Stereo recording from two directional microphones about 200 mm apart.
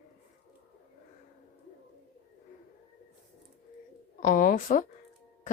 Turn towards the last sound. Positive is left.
turn(degrees=40)  # may be behind; listen again after turning